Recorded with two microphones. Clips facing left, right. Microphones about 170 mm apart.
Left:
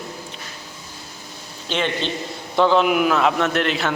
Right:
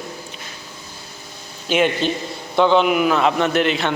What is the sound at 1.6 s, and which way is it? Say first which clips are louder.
Speech: right 5 dB; 10° right (ahead or behind).